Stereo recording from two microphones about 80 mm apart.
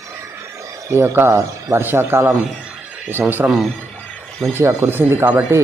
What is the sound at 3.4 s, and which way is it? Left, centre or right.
Speech, right.